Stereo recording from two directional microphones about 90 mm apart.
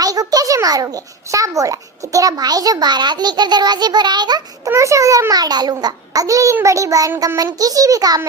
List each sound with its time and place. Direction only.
0.0 s a child's voice: 45° right (ahead or behind)
4.7 s a child's voice: 35° right (ahead or behind)